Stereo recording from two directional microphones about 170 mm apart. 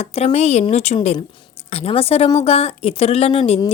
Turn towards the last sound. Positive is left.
turn(degrees=35)  # may be behind; listen again after turning